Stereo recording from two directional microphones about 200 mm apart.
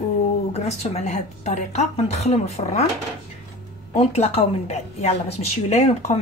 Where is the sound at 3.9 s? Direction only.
30° left (ahead or behind).